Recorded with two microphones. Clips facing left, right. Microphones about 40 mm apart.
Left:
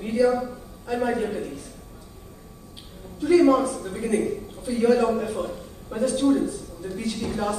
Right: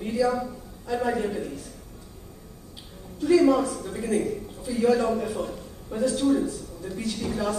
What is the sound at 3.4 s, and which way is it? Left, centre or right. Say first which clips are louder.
A man's voice: left 2 dB; centre.